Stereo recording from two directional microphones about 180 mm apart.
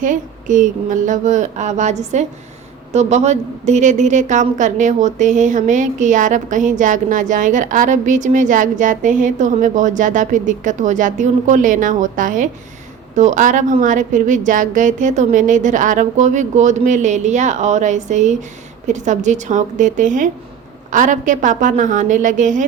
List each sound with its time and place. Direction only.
0.0 s a woman's voice: 45° right (ahead or behind)